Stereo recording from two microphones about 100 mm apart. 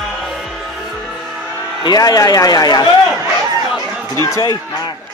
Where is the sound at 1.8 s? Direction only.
45° left (ahead or behind).